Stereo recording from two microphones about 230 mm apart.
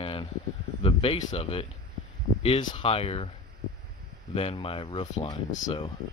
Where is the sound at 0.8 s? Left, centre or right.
Left.